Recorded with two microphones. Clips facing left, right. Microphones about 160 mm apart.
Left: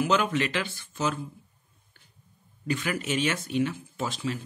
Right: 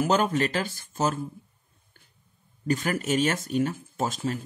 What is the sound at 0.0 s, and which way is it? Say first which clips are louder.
Speech: right 2 dB; 40° right (ahead or behind).